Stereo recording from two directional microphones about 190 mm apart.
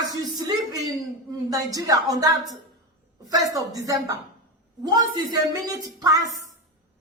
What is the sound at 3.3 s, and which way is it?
A woman's voice, 20° right (ahead or behind).